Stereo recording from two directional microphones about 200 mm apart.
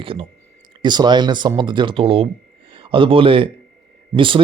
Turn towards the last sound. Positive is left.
turn(degrees=-25)  # may be behind; listen again after turning